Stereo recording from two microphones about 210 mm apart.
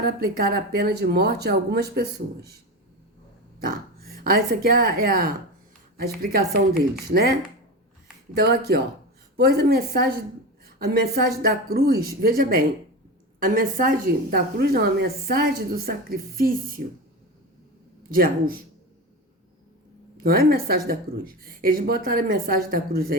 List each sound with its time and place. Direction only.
0.0 s a woman's voice: 45° right (ahead or behind)
3.6 s speech: 45° right (ahead or behind)
7.1 s a woman's voice: 45° right (ahead or behind)
8.4 s a woman's voice: 50° right (ahead or behind)
18.1 s a woman's voice: 45° right (ahead or behind)
20.2 s a woman's voice: 45° right (ahead or behind)